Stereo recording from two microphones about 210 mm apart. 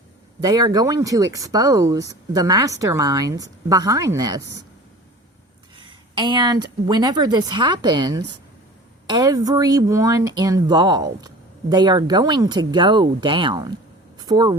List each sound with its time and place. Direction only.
0.4 s speech: 20° right (ahead or behind)
5.7 s a woman's voice: 25° right (ahead or behind)
14.2 s a sound: 20° right (ahead or behind)